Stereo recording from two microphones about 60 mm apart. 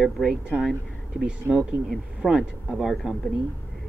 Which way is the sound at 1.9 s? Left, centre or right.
Centre.